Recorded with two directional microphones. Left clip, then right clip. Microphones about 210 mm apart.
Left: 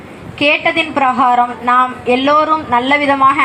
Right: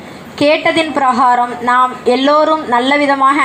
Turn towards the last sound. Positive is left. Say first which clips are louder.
# even
turn(degrees=-35)  # may be behind; listen again after turning